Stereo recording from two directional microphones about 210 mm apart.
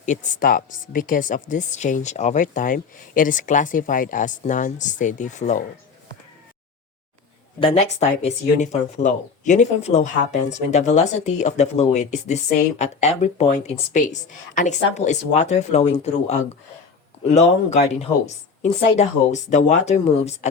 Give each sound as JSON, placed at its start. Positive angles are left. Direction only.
{"t": 0.0, "sound": "a woman's voice", "side_deg": 35}
{"t": 7.6, "sound": "a woman's voice", "side_deg": 30}